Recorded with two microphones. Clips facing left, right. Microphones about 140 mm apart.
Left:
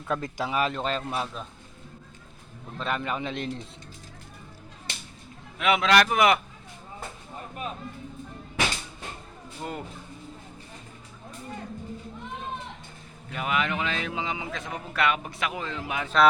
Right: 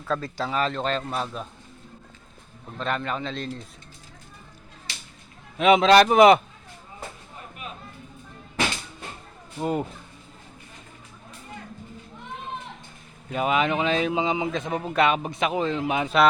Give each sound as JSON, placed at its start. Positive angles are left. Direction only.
{"t": 0.1, "sound": "a man's voice", "side_deg": 15}
{"t": 2.7, "sound": "a man's voice", "side_deg": 5}
{"t": 5.5, "sound": "speech", "side_deg": -25}
{"t": 9.6, "sound": "speech", "side_deg": -25}
{"t": 13.3, "sound": "speech", "side_deg": -25}